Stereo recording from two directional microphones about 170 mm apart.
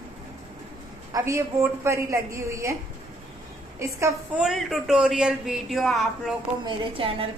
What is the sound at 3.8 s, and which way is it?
Speech, 15° right (ahead or behind).